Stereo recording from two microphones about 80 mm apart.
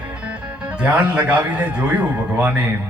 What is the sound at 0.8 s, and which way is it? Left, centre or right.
A man's voice, centre.